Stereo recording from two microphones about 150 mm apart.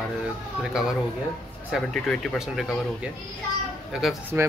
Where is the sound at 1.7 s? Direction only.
5° left (ahead or behind).